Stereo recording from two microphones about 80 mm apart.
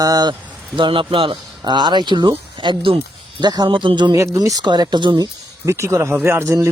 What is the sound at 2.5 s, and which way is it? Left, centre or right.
Speech, right.